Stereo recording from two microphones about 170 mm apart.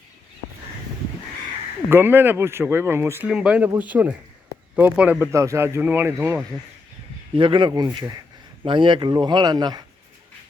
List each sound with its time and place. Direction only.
1.9 s speech: 15° right (ahead or behind)
7.3 s speech: 30° right (ahead or behind)